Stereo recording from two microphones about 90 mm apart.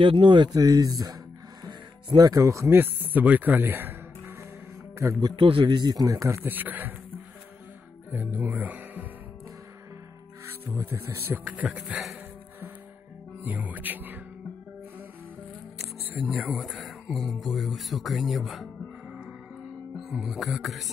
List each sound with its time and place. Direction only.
0.0 s speech: 70° right (ahead or behind)
0.5 s speech: 40° right (ahead or behind)
2.1 s speech: 45° right (ahead or behind); by 3.9 s 25° right (ahead or behind)
5.3 s a man's voice: 70° right (ahead or behind)
5.8 s speech: 50° right (ahead or behind); by 6.9 s 20° right (ahead or behind)
8.1 s speech: 20° right (ahead or behind)
10.7 s speech: 25° right (ahead or behind); by 12.2 s 5° right (ahead or behind)
13.4 s speech: 15° right (ahead or behind)
16.3 s speech: centre (ahead or behind)
20.0 s speech: centre (ahead or behind)